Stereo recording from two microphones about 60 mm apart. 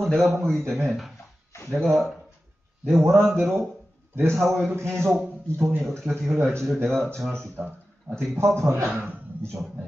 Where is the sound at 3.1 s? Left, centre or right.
Centre.